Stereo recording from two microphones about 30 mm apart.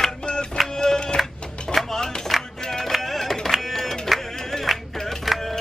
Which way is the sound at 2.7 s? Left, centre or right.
Centre.